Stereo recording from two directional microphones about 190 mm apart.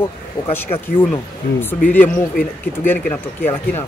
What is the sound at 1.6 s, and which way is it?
A man's voice, 10° left (ahead or behind).